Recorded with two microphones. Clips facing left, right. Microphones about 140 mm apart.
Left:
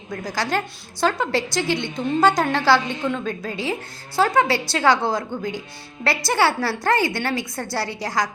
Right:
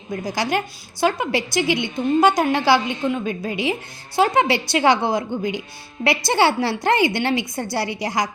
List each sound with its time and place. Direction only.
0.1 s a woman's voice: 15° right (ahead or behind)